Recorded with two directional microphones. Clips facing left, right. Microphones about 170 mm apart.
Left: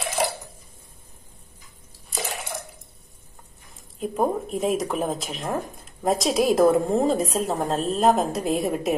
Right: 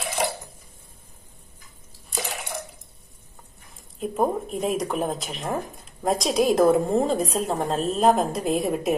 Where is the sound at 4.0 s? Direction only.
Centre (ahead or behind).